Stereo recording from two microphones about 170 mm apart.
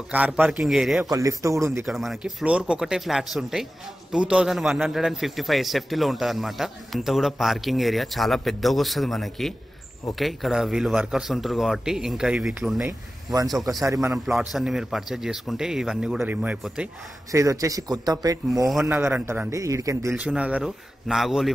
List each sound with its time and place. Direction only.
0.1 s a man's voice: 10° right (ahead or behind)
1.1 s a man's voice: 20° right (ahead or behind)
1.9 s a man's voice: centre (ahead or behind)
13.8 s speech: 20° right (ahead or behind)
14.1 s a man's voice: 5° right (ahead or behind)
17.3 s a man's voice: 20° right (ahead or behind)
20.2 s a man's voice: 5° right (ahead or behind)